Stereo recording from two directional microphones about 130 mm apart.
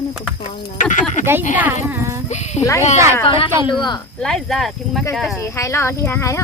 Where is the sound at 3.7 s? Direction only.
35° left (ahead or behind).